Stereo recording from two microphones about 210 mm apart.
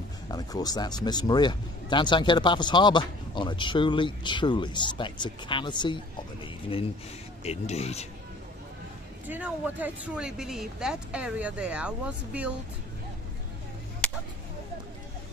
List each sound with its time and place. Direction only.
0.3 s speech: 20° left (ahead or behind)
7.4 s speech: 30° left (ahead or behind)
9.3 s speech: 10° right (ahead or behind)
14.0 s a sound: 5° left (ahead or behind)